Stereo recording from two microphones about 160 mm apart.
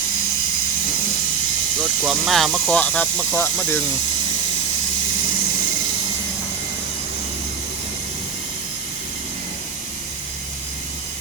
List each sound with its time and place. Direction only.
1.8 s speech: centre (ahead or behind); by 3.8 s 15° left (ahead or behind)